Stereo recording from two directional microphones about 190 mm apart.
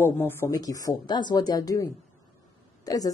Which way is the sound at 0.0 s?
10° left (ahead or behind).